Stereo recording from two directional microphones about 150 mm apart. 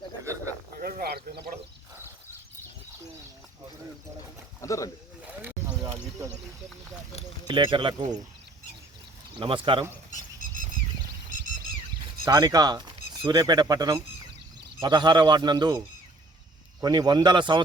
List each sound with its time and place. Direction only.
0.8 s a sound: 85° right
4.6 s speech: 20° left (ahead or behind)
5.4 s a sound: 15° right (ahead or behind)
7.4 s speech: 30° right (ahead or behind)
9.4 s speech: 35° right (ahead or behind)
12.2 s speech: 25° right (ahead or behind)
16.8 s speech: 25° right (ahead or behind)